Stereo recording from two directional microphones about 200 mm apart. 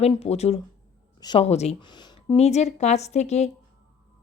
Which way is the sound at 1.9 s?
20° left (ahead or behind).